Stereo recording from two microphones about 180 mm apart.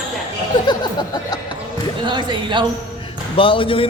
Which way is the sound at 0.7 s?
25° left (ahead or behind).